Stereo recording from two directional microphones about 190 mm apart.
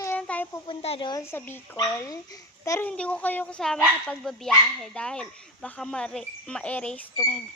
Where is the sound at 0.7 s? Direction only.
30° left (ahead or behind).